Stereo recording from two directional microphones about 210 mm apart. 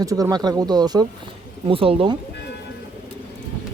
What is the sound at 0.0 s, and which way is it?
Speech, 15° right (ahead or behind).